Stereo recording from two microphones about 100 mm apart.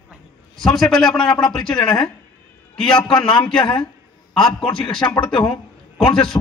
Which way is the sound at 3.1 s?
50° left (ahead or behind).